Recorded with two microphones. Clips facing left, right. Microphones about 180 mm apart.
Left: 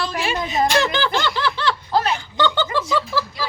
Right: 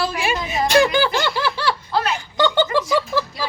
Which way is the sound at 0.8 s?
10° right (ahead or behind).